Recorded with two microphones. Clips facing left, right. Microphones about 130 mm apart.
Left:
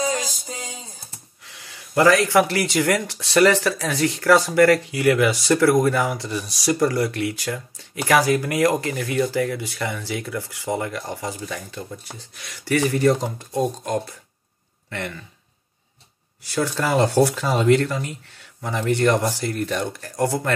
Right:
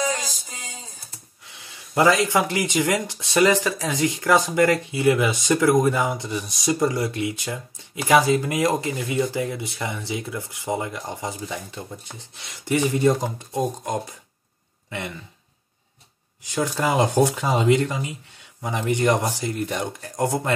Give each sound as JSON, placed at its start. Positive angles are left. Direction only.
{"t": 0.0, "sound": "a sound", "side_deg": 35}
{"t": 1.4, "sound": "speech", "side_deg": -20}
{"t": 16.4, "sound": "speech", "side_deg": -15}